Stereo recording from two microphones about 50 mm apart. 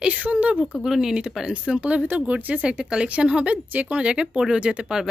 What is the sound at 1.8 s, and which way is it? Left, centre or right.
A woman's voice, right.